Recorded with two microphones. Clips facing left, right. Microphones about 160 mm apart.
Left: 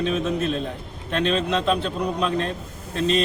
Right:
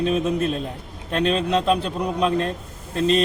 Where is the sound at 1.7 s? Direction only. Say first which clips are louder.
Right 1 dB; 5° right (ahead or behind).